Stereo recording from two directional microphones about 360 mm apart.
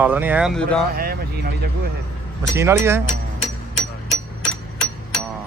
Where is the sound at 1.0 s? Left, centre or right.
Right.